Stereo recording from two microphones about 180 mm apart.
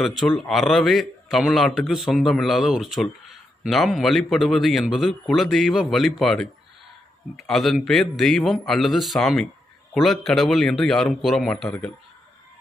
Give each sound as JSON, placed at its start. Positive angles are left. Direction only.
{"t": 0.4, "sound": "a man's voice", "side_deg": 0}